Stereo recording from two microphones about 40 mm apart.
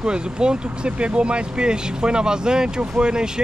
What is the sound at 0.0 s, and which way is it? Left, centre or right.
Speech, right.